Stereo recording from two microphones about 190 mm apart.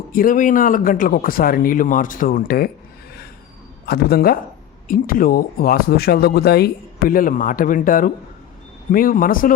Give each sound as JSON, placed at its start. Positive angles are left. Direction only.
{"t": 0.1, "sound": "speech", "side_deg": 45}
{"t": 3.8, "sound": "speech", "side_deg": 55}